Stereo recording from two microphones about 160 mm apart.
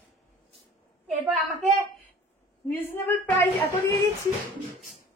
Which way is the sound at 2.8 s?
15° left (ahead or behind).